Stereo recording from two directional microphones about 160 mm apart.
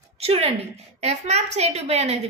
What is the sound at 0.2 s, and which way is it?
A woman's voice, 40° right (ahead or behind).